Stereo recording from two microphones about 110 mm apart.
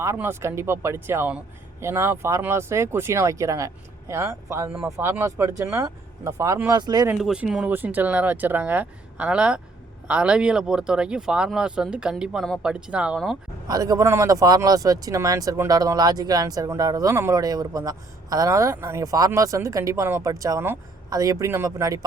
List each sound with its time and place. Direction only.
0.0 s speech: 25° right (ahead or behind)
6.7 s speech: 35° right (ahead or behind)
7.2 s speech: 5° right (ahead or behind)
13.7 s speech: 35° right (ahead or behind)